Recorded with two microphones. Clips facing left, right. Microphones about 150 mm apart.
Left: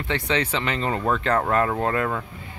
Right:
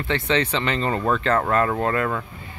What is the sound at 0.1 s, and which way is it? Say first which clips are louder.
Speech: right 2 dB; 10° left (ahead or behind).